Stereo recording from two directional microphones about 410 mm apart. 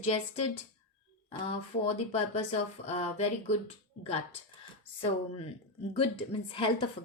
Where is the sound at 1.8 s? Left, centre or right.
Centre.